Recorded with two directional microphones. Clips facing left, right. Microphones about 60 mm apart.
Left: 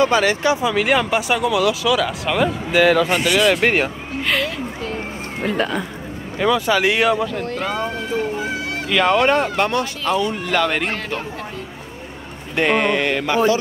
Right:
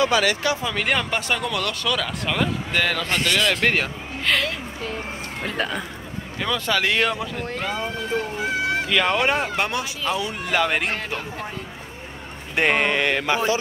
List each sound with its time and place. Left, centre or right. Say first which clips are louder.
0.0 s speech: left 4 dB; left
0.6 s a man's voice: left 6 dB; centre
6.4 s speech: left 6 dB; centre
7.1 s speech: left 7 dB; centre
8.8 s speech: left 8 dB; centre
12.5 s a sound: left 3 dB; right